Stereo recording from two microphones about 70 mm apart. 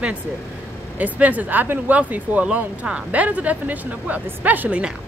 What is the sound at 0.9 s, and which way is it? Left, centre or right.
Speech, right.